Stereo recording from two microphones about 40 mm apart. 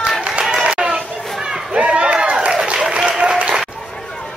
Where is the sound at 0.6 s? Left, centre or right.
Right.